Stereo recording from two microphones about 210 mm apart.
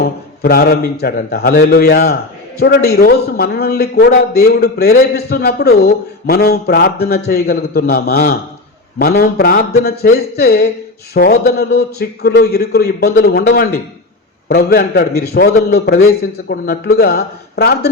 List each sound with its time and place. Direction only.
0.0 s a man's voice: 45° left (ahead or behind)